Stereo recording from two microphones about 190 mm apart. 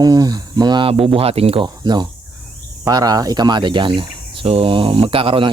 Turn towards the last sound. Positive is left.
turn(degrees=-30)  # may be behind; listen again after turning